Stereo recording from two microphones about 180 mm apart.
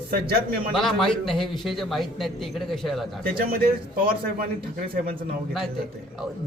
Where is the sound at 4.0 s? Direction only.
50° right (ahead or behind).